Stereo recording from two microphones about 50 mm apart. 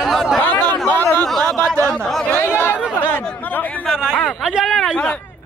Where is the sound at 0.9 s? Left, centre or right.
Left.